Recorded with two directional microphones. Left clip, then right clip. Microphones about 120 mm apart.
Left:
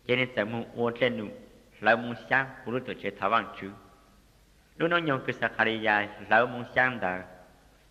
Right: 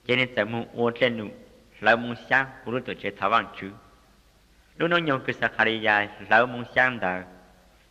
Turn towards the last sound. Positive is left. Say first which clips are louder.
# right 3 dB
turn(degrees=35)  # may be behind; listen again after turning